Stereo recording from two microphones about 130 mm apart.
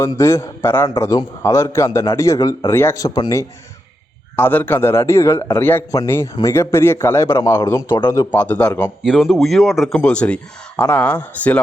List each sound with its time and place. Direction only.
0.0 s a man's voice: 20° left (ahead or behind)
4.4 s a man's voice: 15° left (ahead or behind)
8.3 s a man's voice: 15° left (ahead or behind)
9.0 s speech: centre (ahead or behind)
10.0 s a man's voice: 10° left (ahead or behind)